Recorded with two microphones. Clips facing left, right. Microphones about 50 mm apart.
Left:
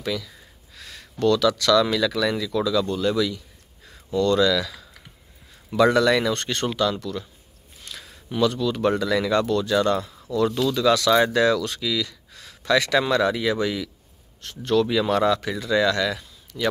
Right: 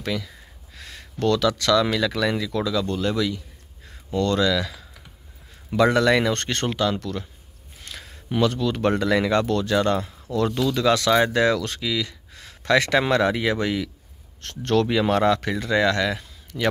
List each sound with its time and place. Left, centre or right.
0.1 s speech: right
0.7 s a sound: right
1.2 s speech: right
6.3 s speech: right
7.8 s a sound: right
8.3 s speech: right
9.5 s speech: right
9.8 s speech: right
14.4 s speech: right
14.9 s speech: right